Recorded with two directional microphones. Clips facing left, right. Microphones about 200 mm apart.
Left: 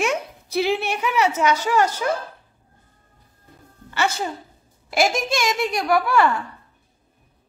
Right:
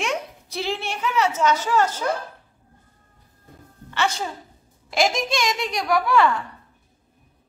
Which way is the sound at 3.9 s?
5° left (ahead or behind).